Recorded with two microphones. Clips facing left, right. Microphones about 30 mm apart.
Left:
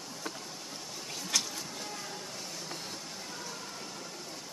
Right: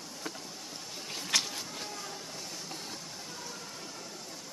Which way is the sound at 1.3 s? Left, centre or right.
Right.